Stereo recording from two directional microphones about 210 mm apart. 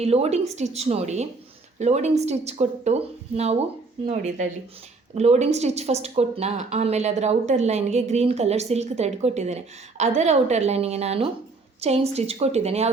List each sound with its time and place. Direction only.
0.0 s a woman's voice: 30° right (ahead or behind)